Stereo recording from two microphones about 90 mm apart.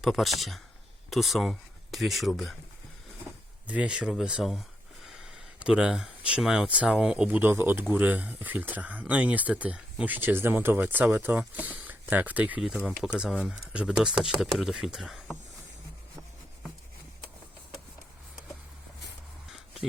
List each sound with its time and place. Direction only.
0.0 s speech: centre (ahead or behind)
3.7 s speech: 10° right (ahead or behind)
7.3 s speech: 20° right (ahead or behind)
12.6 s speech: 5° right (ahead or behind)